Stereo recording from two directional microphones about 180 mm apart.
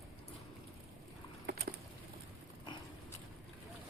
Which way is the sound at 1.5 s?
60° right (ahead or behind).